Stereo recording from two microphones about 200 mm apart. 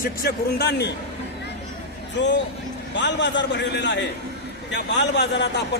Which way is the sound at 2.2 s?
60° left (ahead or behind).